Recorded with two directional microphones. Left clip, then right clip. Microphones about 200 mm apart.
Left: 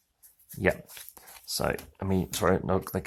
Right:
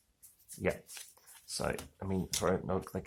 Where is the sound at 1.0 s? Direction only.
Centre (ahead or behind).